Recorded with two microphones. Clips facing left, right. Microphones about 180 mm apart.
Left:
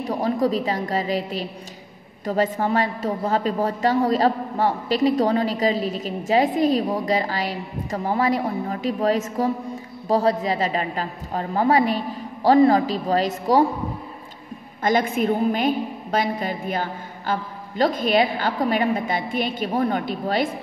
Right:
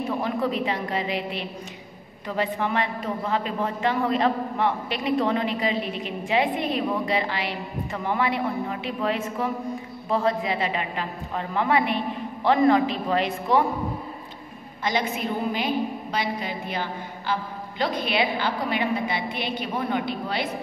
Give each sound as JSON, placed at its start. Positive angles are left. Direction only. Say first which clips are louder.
{"t": 0.0, "sound": "a woman's voice", "louder": "left 4 dB", "side_deg": 40}
{"t": 14.8, "sound": "a woman's voice", "louder": "left 6 dB", "side_deg": 50}